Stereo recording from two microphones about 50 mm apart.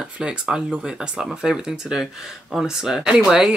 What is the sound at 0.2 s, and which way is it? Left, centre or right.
Speech, centre.